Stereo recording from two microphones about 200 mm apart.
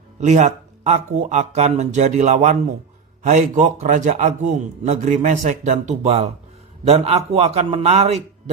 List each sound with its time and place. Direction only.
0.2 s a man's voice: 35° right (ahead or behind)